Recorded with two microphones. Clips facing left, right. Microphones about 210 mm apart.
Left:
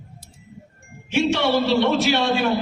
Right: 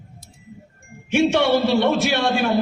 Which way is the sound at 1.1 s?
50° right (ahead or behind).